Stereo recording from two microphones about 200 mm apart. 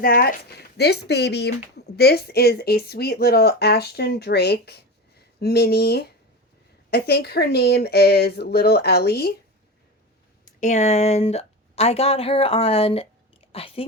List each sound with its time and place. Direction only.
0.0 s speech: 45° left (ahead or behind)
10.6 s a woman's voice: 35° left (ahead or behind)